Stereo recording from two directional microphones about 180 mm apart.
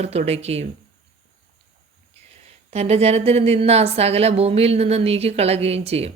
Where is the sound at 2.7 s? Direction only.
35° right (ahead or behind).